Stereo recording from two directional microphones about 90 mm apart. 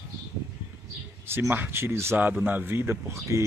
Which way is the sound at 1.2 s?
25° right (ahead or behind).